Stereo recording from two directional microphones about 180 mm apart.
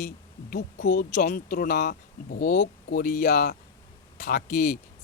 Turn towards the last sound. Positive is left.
turn(degrees=50)  # may be behind; listen again after turning